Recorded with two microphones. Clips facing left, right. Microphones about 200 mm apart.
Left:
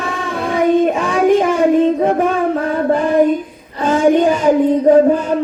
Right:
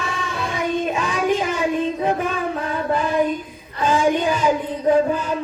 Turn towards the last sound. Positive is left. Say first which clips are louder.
# left 7 dB
turn(degrees=55)  # may be behind; listen again after turning